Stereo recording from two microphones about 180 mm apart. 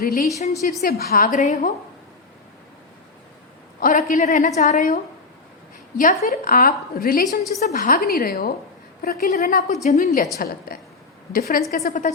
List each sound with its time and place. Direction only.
0.0 s a woman's voice: 50° left (ahead or behind)
3.8 s a woman's voice: 45° left (ahead or behind)
6.0 s a woman's voice: 45° left (ahead or behind)
10.3 s a woman's voice: 55° left (ahead or behind)